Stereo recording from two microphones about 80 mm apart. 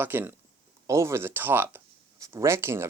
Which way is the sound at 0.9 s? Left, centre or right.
Right.